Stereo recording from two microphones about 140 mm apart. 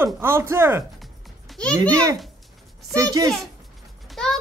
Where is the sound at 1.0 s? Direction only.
5° left (ahead or behind).